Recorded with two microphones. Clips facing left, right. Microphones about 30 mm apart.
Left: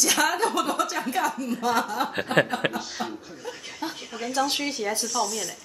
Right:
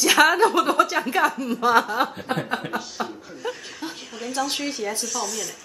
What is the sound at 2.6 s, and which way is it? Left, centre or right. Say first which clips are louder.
Speech: left 2 dB; left.